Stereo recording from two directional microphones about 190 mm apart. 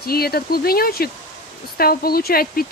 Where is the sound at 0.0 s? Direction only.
55° left (ahead or behind).